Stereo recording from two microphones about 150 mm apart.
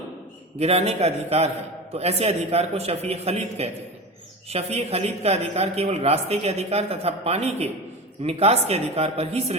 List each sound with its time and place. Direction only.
0.6 s a man's voice: 45° right (ahead or behind)